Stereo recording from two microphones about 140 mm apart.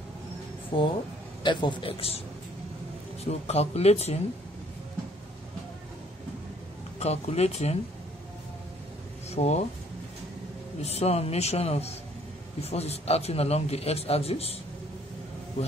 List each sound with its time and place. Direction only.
0.7 s a man's voice: 35° left (ahead or behind)
3.3 s a man's voice: 50° left (ahead or behind)
7.0 s a man's voice: 50° left (ahead or behind)
9.3 s a man's voice: 50° left (ahead or behind)
10.8 s a man's voice: 50° left (ahead or behind)